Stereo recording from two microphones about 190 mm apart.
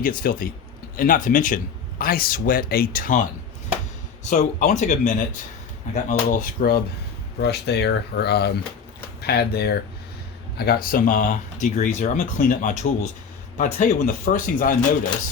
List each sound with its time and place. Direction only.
0.0 s speech: 50° left (ahead or behind)